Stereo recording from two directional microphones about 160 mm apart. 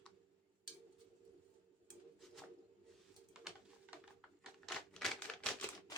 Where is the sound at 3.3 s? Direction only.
5° right (ahead or behind).